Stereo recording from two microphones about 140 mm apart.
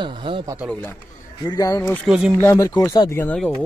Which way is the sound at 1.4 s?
25° left (ahead or behind).